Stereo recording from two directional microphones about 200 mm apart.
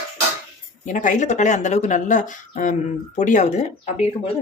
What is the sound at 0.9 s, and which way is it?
A woman's voice, 40° left (ahead or behind).